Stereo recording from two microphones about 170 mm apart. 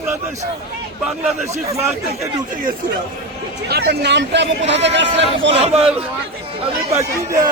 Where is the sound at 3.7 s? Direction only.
70° right (ahead or behind); by 5.5 s 90° right.